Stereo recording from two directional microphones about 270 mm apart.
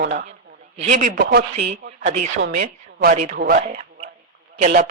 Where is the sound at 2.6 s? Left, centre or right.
Right.